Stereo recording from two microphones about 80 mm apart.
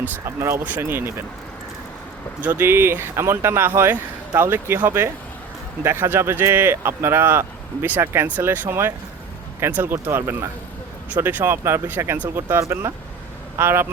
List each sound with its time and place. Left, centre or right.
0.0 s speech: right
2.4 s speech: right
4.9 s speech: right